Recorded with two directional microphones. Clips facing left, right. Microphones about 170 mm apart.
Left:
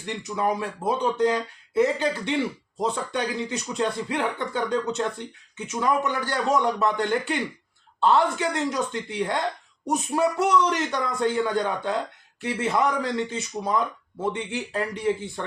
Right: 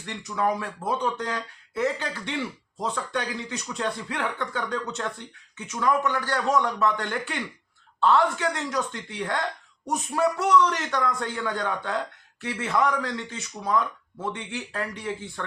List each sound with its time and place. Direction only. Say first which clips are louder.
0.0 s speech: left 1 dB; 20° left (ahead or behind)